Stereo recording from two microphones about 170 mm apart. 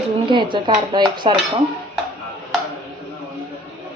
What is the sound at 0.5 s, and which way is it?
Speech, 25° right (ahead or behind).